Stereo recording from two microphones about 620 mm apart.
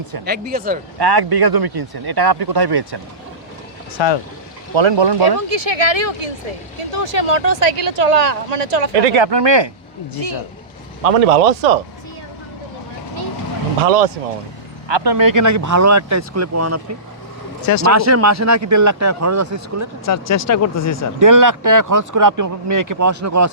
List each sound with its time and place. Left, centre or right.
0.3 s speech: centre
0.9 s speech: right
3.9 s speech: left
4.7 s speech: right
5.5 s speech: right
9.1 s speech: right
11.0 s speech: right
13.8 s speech: right
14.8 s speech: right
17.6 s speech: left
17.9 s speech: right
20.1 s speech: left
21.2 s speech: right